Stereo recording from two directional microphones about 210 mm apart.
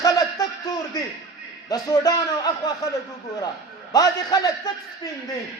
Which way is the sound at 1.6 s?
15° left (ahead or behind).